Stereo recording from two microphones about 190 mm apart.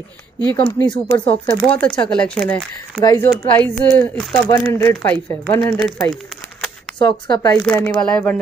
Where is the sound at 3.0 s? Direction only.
20° left (ahead or behind).